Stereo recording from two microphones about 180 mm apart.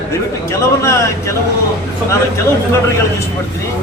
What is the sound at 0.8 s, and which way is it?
Speech, 15° left (ahead or behind).